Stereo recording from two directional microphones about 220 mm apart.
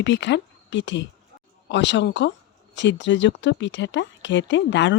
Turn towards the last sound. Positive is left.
turn(degrees=55)  # may be behind; listen again after turning